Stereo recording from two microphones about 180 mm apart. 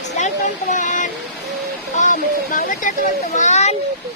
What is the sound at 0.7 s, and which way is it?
A child's voice, 45° left (ahead or behind).